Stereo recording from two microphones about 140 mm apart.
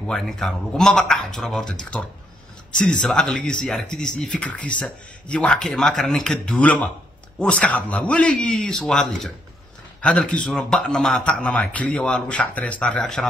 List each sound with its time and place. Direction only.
0.0 s speech: 5° left (ahead or behind)